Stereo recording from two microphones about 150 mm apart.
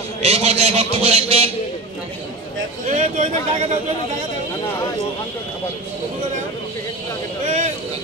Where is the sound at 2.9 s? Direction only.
55° right (ahead or behind).